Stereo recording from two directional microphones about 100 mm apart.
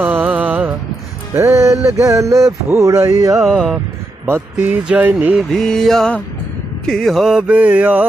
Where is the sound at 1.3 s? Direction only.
30° right (ahead or behind).